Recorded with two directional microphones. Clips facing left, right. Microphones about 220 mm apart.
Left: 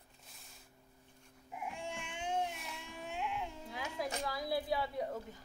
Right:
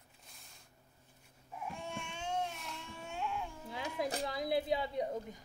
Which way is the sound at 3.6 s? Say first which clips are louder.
Right 5 dB; 25° right (ahead or behind).